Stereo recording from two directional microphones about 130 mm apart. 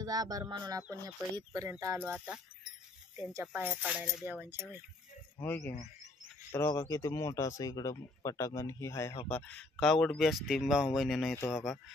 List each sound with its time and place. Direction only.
0.0 s speech: 30° right (ahead or behind)
2.0 s speech: 10° right (ahead or behind)
3.5 s speech: 10° right (ahead or behind)
5.4 s speech: 15° left (ahead or behind)
6.8 s speech: 25° left (ahead or behind)
9.3 s speech: 10° left (ahead or behind)